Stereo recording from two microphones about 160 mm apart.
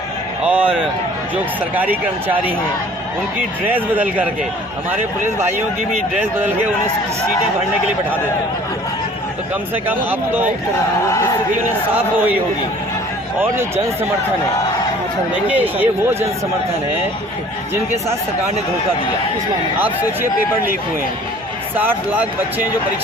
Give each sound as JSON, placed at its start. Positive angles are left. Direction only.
{"t": 0.4, "sound": "a man's voice", "side_deg": -10}
{"t": 3.7, "sound": "speech", "side_deg": -10}
{"t": 10.1, "sound": "speech", "side_deg": -10}
{"t": 13.4, "sound": "speech", "side_deg": -15}
{"t": 15.4, "sound": "speech", "side_deg": -10}